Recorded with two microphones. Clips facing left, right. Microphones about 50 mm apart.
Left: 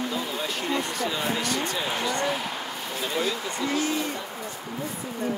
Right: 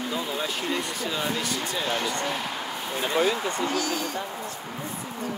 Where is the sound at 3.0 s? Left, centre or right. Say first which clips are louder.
Right 4 dB; right.